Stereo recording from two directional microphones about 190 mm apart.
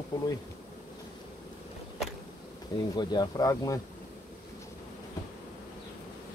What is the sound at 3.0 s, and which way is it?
Speech, 20° left (ahead or behind).